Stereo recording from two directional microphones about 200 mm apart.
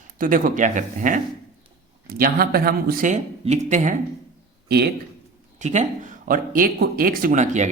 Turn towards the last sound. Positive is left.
turn(degrees=-35)  # may be behind; listen again after turning